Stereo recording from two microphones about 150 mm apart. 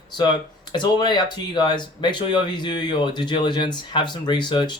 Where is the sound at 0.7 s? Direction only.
30° left (ahead or behind).